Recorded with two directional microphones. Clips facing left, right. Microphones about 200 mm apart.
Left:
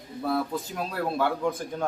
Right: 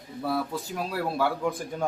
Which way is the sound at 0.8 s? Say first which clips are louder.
Even; 5° right (ahead or behind).